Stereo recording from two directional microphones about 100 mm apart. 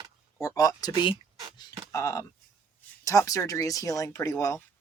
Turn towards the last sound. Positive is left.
turn(degrees=35)  # may be behind; listen again after turning